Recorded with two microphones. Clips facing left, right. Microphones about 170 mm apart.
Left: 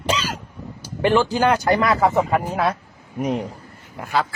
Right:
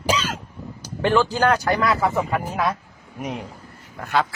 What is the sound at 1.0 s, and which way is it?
Speech, 10° left (ahead or behind).